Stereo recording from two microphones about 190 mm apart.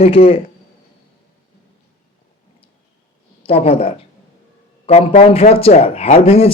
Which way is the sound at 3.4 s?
30° left (ahead or behind).